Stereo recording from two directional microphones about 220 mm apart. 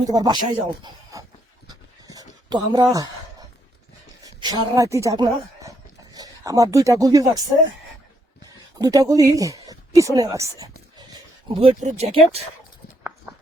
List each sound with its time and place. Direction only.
0.1 s speech: 15° right (ahead or behind)
1.6 s a sound: 20° right (ahead or behind)
4.2 s a sound: 15° right (ahead or behind)
4.7 s a woman's voice: 15° right (ahead or behind)
8.8 s a woman's voice: 15° right (ahead or behind)
11.4 s speech: 25° right (ahead or behind)